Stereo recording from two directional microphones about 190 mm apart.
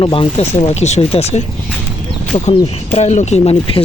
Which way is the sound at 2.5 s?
35° left (ahead or behind).